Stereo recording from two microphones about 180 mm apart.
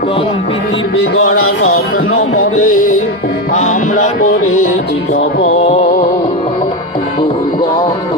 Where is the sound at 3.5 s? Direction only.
45° left (ahead or behind).